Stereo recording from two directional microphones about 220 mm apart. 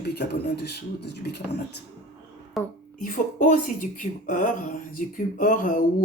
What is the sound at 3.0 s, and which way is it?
Speech, 40° left (ahead or behind).